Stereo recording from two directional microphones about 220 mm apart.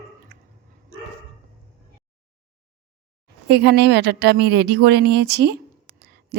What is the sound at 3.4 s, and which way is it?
Speech, 50° right (ahead or behind).